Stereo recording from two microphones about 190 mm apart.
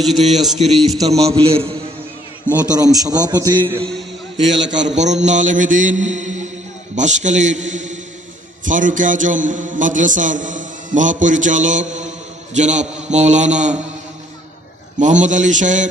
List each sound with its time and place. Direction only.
0.0 s a man's voice: centre (ahead or behind)
1.0 s a man's voice: 35° right (ahead or behind)
2.5 s a man's voice: 20° right (ahead or behind)
4.4 s a man's voice: 75° right (ahead or behind)
4.9 s a man's voice: 35° right (ahead or behind)
14.9 s a man's voice: 40° right (ahead or behind)